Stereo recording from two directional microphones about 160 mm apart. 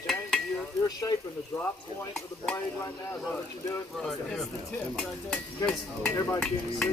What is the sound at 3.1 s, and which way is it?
Speech, 15° left (ahead or behind).